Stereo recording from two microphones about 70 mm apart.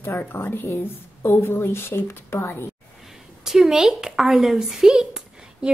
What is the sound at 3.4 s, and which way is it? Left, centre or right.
A woman's voice, centre.